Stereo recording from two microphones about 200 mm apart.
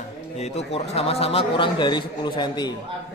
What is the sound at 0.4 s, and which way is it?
A man's voice, 35° left (ahead or behind).